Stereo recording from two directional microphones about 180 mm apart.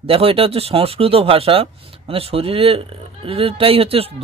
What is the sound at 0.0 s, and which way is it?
Speech, 30° right (ahead or behind).